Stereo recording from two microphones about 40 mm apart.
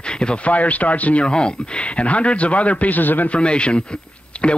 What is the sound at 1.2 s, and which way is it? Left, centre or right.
A man's voice, left.